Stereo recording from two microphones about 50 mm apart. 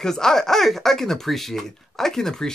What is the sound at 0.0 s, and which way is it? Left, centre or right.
Speech, centre.